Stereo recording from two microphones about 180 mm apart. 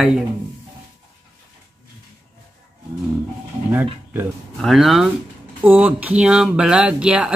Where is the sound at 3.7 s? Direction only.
10° right (ahead or behind).